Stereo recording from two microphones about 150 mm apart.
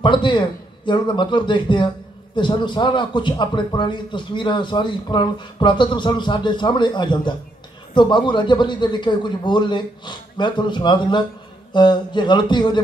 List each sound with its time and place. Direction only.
0.0 s a man's voice: 30° left (ahead or behind)